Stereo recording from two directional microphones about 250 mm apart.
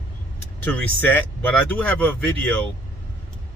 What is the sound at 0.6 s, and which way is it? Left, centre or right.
Speech, centre.